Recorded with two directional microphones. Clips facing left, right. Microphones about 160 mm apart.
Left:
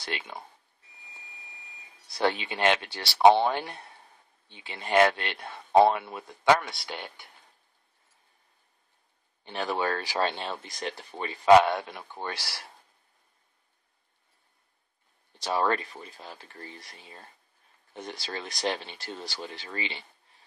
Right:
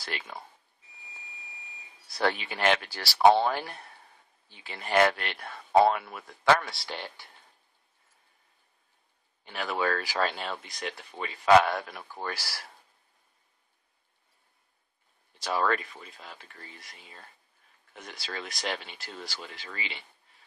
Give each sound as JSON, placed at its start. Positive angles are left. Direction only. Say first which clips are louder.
{"t": 0.0, "sound": "speech", "louder": "left 2 dB", "side_deg": 25}
{"t": 2.2, "sound": "speech", "louder": "left 1 dB", "side_deg": 25}
{"t": 9.4, "sound": "speech", "louder": "left 1 dB", "side_deg": 30}
{"t": 11.4, "sound": "speech", "louder": "left 2 dB", "side_deg": 25}
{"t": 15.4, "sound": "speech", "louder": "left 1 dB", "side_deg": 25}